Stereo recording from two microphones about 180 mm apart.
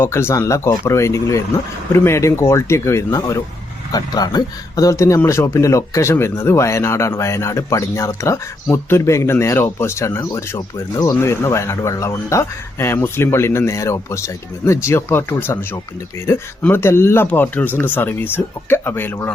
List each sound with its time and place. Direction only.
0.0 s speech: 15° left (ahead or behind)